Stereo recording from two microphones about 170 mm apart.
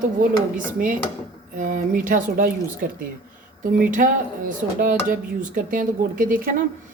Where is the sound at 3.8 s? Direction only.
50° right (ahead or behind).